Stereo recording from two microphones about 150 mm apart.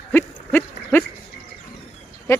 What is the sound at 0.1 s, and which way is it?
Owl, 10° left (ahead or behind).